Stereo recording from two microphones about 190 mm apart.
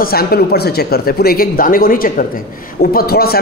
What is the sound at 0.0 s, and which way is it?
A woman's voice, 50° left (ahead or behind).